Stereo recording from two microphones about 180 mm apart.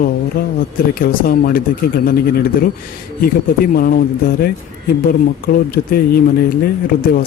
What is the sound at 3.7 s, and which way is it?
Speech, 55° left (ahead or behind).